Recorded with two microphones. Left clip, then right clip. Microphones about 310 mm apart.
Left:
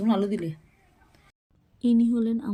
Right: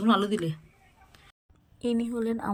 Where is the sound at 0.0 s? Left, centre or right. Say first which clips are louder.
Right 1 dB; centre.